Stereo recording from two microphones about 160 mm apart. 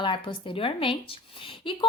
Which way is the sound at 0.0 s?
30° left (ahead or behind).